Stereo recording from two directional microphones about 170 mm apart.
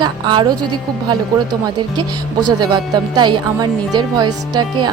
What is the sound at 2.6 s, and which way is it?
Speech, 25° right (ahead or behind).